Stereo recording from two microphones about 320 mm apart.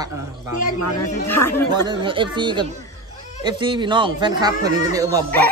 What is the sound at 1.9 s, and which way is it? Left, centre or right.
Speech, centre.